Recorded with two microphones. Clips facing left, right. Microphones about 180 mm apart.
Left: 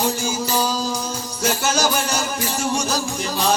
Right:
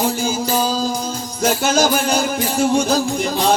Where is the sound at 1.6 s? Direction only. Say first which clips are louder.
Right 5 dB; 55° right (ahead or behind).